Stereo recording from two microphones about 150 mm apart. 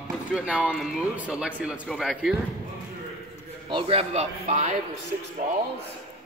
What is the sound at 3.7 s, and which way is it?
Speech, 40° right (ahead or behind).